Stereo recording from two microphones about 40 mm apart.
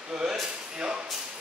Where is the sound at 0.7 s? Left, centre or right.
Right.